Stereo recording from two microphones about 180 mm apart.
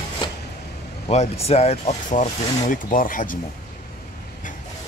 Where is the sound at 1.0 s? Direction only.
35° left (ahead or behind).